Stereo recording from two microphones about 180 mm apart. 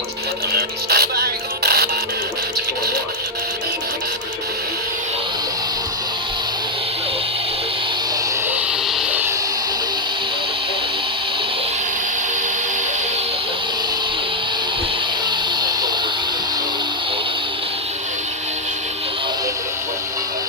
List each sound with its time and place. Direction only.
0.5 s music: 60° right (ahead or behind)